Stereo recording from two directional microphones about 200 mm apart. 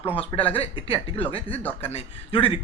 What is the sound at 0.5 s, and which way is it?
Speech, 30° left (ahead or behind).